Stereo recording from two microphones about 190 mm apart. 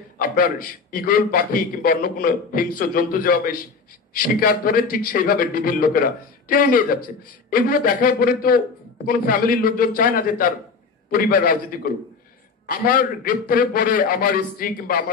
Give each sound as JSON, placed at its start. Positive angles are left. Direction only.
{"t": 0.2, "sound": "a man's voice", "side_deg": 45}